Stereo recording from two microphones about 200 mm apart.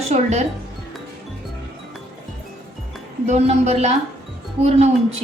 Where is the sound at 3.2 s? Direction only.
35° right (ahead or behind).